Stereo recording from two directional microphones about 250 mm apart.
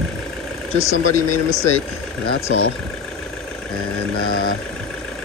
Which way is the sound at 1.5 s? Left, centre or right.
Right.